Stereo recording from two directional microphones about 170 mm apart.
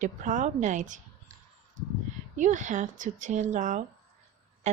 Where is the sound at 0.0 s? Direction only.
50° right (ahead or behind).